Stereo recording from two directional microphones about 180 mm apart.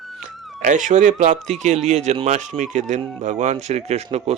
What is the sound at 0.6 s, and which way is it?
A man's voice, 45° right (ahead or behind).